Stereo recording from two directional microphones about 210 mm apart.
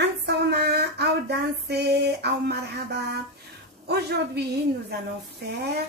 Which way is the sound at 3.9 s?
50° right (ahead or behind).